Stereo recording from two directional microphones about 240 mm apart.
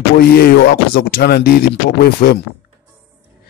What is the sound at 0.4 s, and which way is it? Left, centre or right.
Speech, left.